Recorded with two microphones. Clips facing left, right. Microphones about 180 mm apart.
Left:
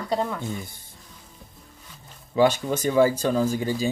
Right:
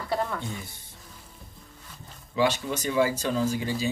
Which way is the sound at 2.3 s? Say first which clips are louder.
Left 5 dB; 50° left (ahead or behind).